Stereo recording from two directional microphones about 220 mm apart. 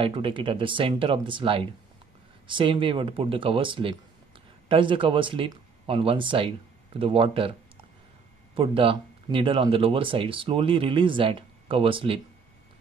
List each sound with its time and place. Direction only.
0.0 s speech: 25° right (ahead or behind)